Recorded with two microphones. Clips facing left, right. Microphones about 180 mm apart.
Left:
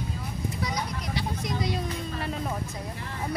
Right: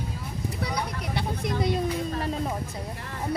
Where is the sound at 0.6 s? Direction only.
60° right (ahead or behind).